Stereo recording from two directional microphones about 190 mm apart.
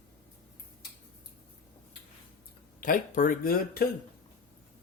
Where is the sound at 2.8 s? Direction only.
45° left (ahead or behind).